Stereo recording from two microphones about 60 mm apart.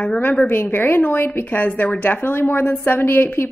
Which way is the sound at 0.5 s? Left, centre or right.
Left.